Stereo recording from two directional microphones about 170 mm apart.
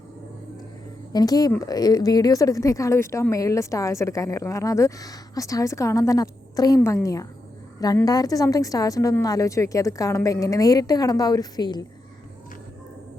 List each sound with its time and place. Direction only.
1.1 s speech: 20° left (ahead or behind)